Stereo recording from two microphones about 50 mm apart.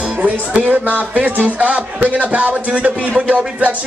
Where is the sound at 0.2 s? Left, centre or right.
Right.